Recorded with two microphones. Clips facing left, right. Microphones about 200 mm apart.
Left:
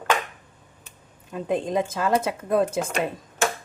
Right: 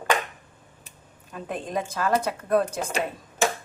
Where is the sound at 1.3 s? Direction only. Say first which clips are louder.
Left 6 dB; 25° left (ahead or behind).